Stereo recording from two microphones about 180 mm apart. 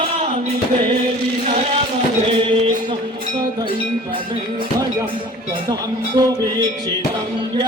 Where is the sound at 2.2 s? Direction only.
30° right (ahead or behind).